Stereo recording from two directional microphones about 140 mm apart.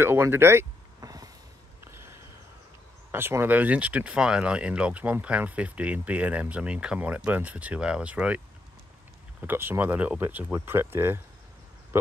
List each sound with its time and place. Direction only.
0.0 s a sound: 15° right (ahead or behind)
3.1 s speech: 15° right (ahead or behind)
9.4 s speech: 15° right (ahead or behind)